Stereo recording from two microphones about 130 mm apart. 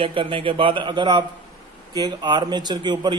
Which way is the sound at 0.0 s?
40° right (ahead or behind).